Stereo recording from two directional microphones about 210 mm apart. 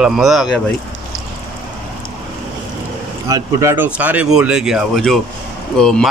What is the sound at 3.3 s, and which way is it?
Speech, 15° right (ahead or behind).